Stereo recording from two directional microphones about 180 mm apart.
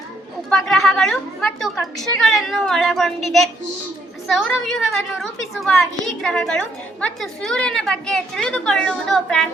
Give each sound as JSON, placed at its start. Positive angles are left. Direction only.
{"t": 0.5, "sound": "a woman's voice", "side_deg": 0}